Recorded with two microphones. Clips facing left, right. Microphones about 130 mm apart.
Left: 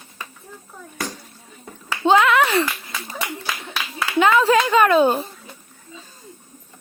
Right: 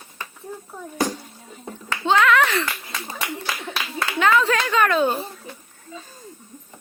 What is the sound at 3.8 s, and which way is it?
Clapping, 5° left (ahead or behind).